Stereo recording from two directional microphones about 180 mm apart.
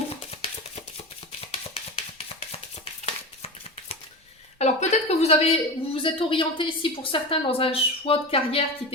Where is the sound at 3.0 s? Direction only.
35° left (ahead or behind).